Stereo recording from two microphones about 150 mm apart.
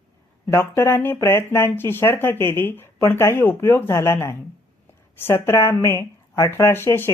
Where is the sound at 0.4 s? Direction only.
20° left (ahead or behind).